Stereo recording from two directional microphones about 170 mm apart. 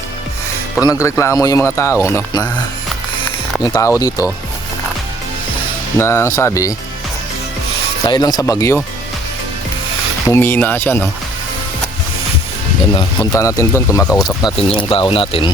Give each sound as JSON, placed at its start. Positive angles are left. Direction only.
{"t": 0.9, "sound": "speech", "side_deg": 15}
{"t": 3.6, "sound": "speech", "side_deg": 20}
{"t": 6.0, "sound": "speech", "side_deg": 15}
{"t": 8.0, "sound": "speech", "side_deg": 25}
{"t": 10.2, "sound": "speech", "side_deg": 15}
{"t": 12.9, "sound": "speech", "side_deg": 25}
{"t": 14.4, "sound": "speech", "side_deg": 30}